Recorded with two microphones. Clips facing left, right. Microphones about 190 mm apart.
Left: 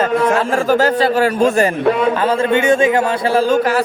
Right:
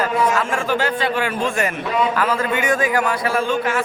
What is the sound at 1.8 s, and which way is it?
Speech, 55° left (ahead or behind).